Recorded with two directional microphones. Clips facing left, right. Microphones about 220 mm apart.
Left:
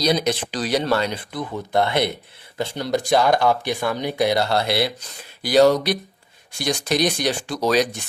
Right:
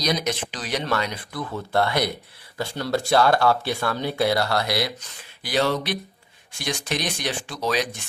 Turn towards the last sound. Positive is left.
turn(degrees=40)  # may be behind; listen again after turning